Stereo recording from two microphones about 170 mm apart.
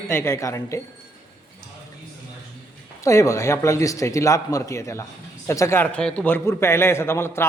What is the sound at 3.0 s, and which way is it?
Speech, 15° left (ahead or behind).